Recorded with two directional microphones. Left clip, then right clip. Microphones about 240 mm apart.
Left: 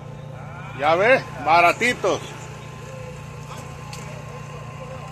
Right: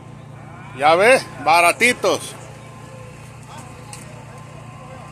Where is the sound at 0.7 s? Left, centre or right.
Right.